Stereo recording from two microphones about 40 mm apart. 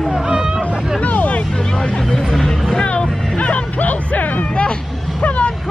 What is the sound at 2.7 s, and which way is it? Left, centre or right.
Vehicle, left.